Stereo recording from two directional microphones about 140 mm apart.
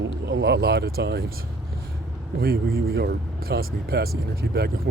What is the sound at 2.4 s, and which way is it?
Speech, 90° right.